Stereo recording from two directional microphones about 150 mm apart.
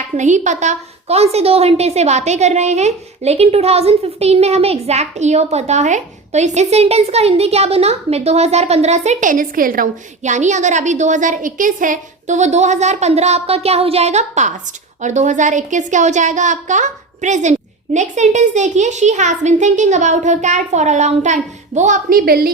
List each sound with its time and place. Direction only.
0.2 s a woman's voice: 55° right (ahead or behind)
22.3 s a woman's voice: 85° right